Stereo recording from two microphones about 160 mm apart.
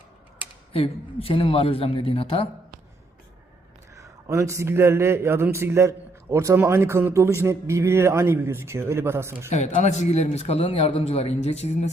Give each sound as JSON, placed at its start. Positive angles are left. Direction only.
{"t": 0.7, "sound": "a man's voice", "side_deg": 35}
{"t": 4.0, "sound": "speech", "side_deg": -20}
{"t": 9.5, "sound": "a man's voice", "side_deg": 45}